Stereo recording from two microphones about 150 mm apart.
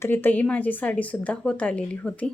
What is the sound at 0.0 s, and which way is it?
Speech, 15° left (ahead or behind).